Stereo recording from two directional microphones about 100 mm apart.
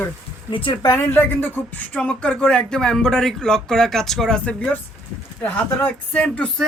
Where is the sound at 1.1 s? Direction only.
20° left (ahead or behind).